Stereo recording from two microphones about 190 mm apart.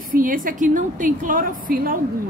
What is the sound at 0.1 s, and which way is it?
A woman's voice, 45° right (ahead or behind).